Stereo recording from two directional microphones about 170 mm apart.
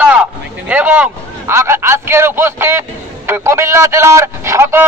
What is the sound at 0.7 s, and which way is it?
A man's voice, 10° right (ahead or behind).